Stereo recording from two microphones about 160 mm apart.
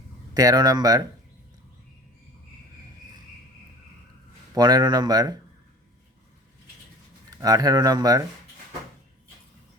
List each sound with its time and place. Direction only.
0.3 s speech: 25° right (ahead or behind)
4.5 s speech: 25° right (ahead or behind)
7.3 s speech: 20° right (ahead or behind)